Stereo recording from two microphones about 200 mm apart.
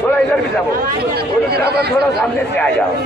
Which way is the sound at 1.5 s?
55° right (ahead or behind).